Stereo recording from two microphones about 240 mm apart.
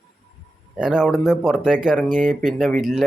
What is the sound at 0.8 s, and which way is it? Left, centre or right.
Speech, centre.